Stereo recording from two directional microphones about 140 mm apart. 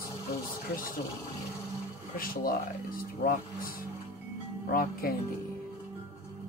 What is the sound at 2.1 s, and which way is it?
Speech, 90° left.